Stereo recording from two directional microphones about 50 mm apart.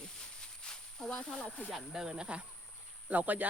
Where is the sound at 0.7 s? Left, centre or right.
Centre.